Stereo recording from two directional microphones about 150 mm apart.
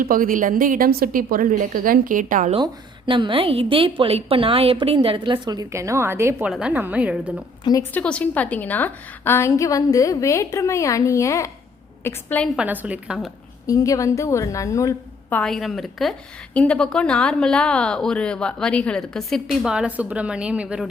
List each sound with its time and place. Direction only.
0.0 s a woman's voice: 70° right (ahead or behind)
3.1 s a woman's voice: 35° right (ahead or behind); by 7.4 s 10° right (ahead or behind)
7.6 s a woman's voice: 25° left (ahead or behind)
7.9 s a woman's voice: 10° left (ahead or behind)
12.5 s a woman's voice: 10° right (ahead or behind)
13.7 s a woman's voice: 20° left (ahead or behind)
15.3 s a woman's voice: 5° left (ahead or behind)